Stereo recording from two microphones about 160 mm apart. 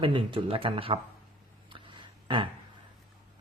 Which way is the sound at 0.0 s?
30° right (ahead or behind).